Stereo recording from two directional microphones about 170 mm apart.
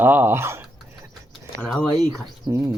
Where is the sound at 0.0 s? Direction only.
10° right (ahead or behind).